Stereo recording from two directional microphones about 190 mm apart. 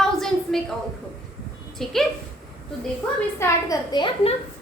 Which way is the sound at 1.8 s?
Centre (ahead or behind).